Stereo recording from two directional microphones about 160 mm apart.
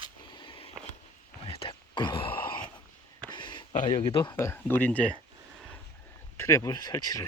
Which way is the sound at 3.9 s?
35° left (ahead or behind).